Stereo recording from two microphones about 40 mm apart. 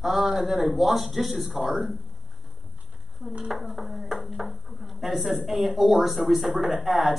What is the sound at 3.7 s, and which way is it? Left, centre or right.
Speech, centre.